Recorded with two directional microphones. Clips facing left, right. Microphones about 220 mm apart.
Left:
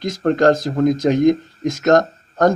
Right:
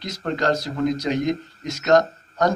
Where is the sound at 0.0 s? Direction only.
50° left (ahead or behind).